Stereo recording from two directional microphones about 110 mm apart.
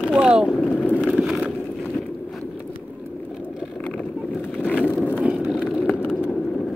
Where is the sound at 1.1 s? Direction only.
5° right (ahead or behind).